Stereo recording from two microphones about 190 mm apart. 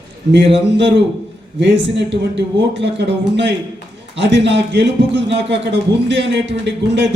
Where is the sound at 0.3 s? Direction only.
65° right (ahead or behind).